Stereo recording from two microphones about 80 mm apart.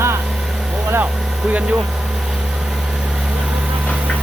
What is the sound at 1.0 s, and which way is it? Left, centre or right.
Speech, centre.